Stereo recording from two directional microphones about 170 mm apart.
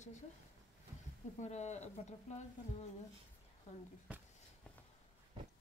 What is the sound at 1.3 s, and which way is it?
Speech, 40° left (ahead or behind).